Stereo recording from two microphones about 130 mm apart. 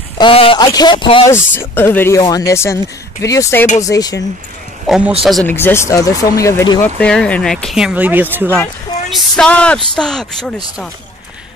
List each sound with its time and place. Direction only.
0.2 s speech: 45° left (ahead or behind)
0.6 s speech: 35° left (ahead or behind)
1.2 s speech: 20° left (ahead or behind)
2.1 s speech: 30° left (ahead or behind)
4.8 s a man's voice: 5° right (ahead or behind)
5.5 s speech: 15° left (ahead or behind)
7.0 s speech: 10° left (ahead or behind); by 8.5 s 15° right (ahead or behind)
9.1 s speech: 5° left (ahead or behind)